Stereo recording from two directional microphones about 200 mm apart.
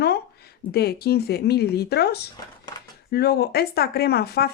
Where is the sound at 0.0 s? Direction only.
55° left (ahead or behind).